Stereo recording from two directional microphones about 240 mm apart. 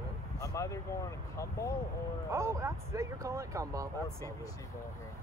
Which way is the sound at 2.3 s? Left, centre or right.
Centre.